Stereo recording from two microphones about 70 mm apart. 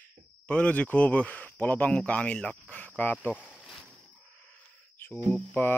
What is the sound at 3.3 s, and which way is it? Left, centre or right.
Speech, centre.